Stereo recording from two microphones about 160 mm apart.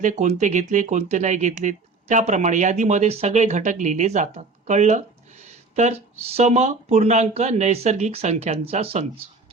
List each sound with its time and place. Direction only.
0.0 s speech: 50° right (ahead or behind)